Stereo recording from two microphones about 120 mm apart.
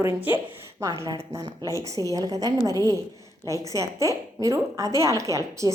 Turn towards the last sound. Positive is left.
turn(degrees=-25)  # may be behind; listen again after turning